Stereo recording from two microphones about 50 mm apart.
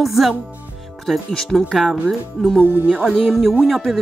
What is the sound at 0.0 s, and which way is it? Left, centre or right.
Speech, centre.